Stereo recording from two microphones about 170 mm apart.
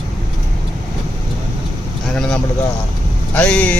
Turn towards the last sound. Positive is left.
turn(degrees=5)  # may be behind; listen again after turning